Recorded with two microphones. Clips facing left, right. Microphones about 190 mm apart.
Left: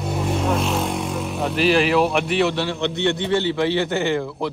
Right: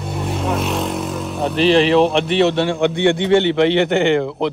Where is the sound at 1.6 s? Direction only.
25° right (ahead or behind).